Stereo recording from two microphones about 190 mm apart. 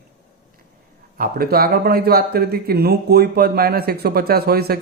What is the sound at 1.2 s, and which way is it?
Speech, 55° right (ahead or behind).